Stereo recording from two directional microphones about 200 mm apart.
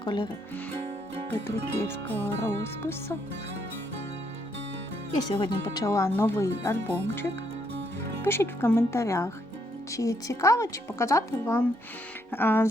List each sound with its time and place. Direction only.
0.0 s speech: 20° left (ahead or behind)
1.3 s music: 10° left (ahead or behind)
5.3 s music: 20° left (ahead or behind)
8.2 s music: 10° left (ahead or behind)